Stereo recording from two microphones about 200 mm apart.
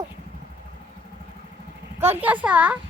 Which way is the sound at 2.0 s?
10° right (ahead or behind).